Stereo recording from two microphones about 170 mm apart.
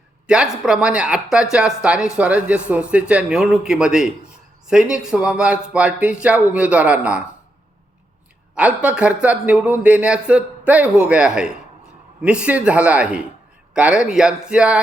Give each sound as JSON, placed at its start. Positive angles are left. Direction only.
{"t": 0.6, "sound": "speech", "side_deg": -5}
{"t": 8.5, "sound": "speech", "side_deg": -10}